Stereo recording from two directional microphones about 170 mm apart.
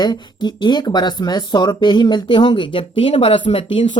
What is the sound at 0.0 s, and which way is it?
Speech, 25° left (ahead or behind).